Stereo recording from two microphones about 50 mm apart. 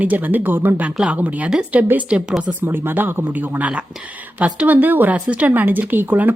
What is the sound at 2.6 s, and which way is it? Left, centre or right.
Speech, right.